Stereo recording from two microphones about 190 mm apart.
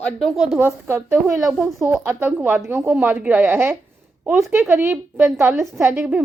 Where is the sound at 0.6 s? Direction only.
15° right (ahead or behind).